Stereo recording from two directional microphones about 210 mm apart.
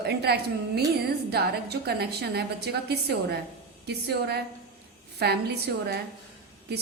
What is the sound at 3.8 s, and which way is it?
A woman's voice, 50° right (ahead or behind).